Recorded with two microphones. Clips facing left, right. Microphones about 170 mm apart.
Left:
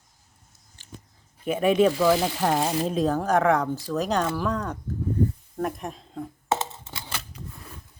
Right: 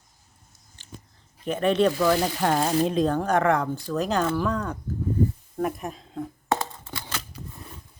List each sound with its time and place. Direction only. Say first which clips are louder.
1.5 s speech: left 1 dB; 10° left (ahead or behind)
6.5 s scissors: even; 20° left (ahead or behind)